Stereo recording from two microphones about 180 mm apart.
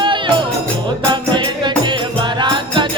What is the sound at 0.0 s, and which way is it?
Music, 25° right (ahead or behind).